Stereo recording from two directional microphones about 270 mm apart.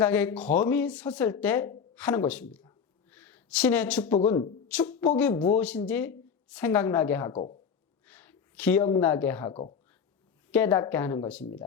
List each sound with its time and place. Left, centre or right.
0.0 s speech: centre
4.1 s speech: centre
4.7 s a woman's voice: centre
8.0 s a sound: centre
9.0 s a woman's voice: centre
9.5 s speech: left
10.5 s a woman's voice: centre